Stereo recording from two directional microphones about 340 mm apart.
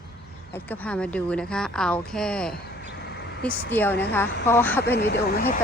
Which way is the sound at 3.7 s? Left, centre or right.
Centre.